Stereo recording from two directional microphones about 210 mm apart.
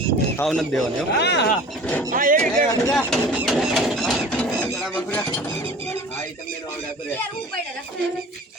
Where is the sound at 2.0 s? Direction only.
40° right (ahead or behind).